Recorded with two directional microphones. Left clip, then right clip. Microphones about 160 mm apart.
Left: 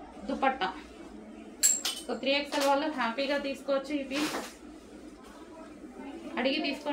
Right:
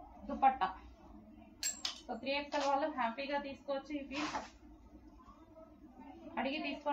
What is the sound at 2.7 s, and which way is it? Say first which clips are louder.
Speech: left 5 dB; 25° left (ahead or behind).